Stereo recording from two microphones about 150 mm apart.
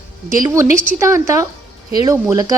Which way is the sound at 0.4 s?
20° right (ahead or behind).